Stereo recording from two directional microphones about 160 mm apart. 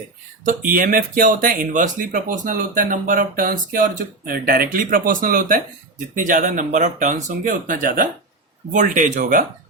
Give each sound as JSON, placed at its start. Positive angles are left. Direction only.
{"t": 0.4, "sound": "speech", "side_deg": -60}